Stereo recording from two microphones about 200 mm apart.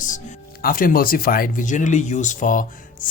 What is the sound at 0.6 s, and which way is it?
Speech, 45° left (ahead or behind).